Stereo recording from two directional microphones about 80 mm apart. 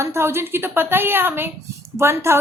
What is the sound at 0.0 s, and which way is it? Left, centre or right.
A woman's voice, right.